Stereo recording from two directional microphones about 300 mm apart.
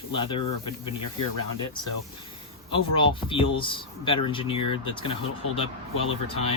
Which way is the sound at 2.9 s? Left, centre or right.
Centre.